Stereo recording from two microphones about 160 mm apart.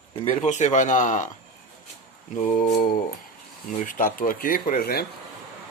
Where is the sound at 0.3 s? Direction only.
45° left (ahead or behind).